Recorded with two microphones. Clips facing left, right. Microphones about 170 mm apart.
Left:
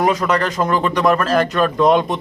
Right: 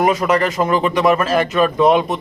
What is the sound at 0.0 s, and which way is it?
A man's voice, 5° right (ahead or behind).